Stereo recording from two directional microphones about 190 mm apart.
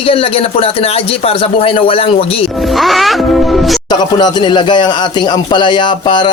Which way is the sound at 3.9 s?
20° left (ahead or behind).